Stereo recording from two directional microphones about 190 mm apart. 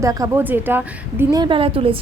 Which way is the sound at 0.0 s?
15° right (ahead or behind).